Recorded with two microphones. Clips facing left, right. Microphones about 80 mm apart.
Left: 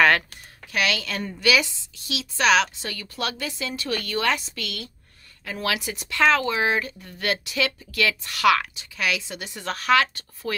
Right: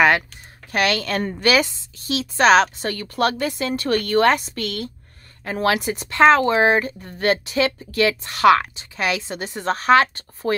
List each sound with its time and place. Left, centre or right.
0.7 s speech: right